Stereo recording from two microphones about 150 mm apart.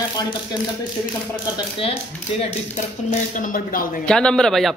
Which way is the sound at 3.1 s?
65° left (ahead or behind).